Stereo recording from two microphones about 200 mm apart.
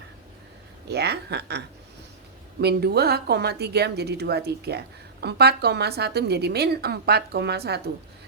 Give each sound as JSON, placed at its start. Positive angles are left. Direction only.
{"t": 0.9, "sound": "speech", "side_deg": -55}